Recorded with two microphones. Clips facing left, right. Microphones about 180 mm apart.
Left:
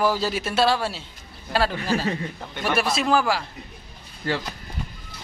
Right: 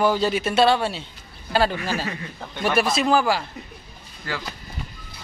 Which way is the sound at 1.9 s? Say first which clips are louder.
Left 4 dB; 30° left (ahead or behind).